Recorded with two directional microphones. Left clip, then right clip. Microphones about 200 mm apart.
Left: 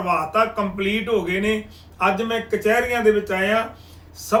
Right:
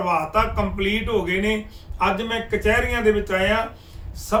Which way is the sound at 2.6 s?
10° right (ahead or behind).